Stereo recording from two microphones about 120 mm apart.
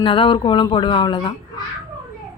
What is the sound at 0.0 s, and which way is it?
Speech, 45° left (ahead or behind).